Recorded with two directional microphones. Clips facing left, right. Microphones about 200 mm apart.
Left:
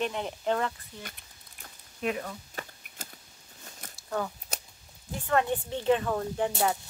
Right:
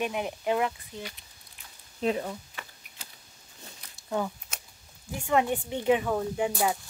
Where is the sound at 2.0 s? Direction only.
30° right (ahead or behind).